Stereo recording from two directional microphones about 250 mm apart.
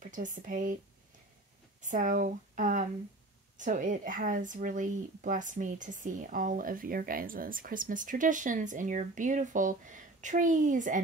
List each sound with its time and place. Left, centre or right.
0.0 s speech: right
1.8 s speech: right